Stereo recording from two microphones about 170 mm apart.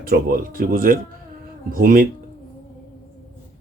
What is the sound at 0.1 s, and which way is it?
Speech, 55° right (ahead or behind).